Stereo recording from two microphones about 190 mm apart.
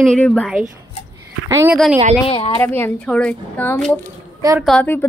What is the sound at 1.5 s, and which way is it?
Speech, 15° right (ahead or behind).